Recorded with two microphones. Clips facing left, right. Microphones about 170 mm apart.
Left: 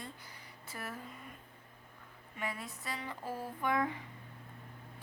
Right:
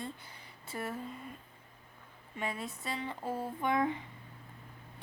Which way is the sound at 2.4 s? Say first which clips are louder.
Right 3 dB; 25° right (ahead or behind).